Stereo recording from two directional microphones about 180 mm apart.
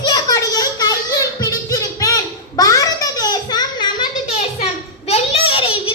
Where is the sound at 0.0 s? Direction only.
20° left (ahead or behind).